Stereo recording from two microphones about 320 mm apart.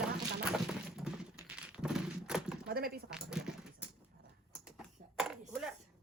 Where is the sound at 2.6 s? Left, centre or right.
Right.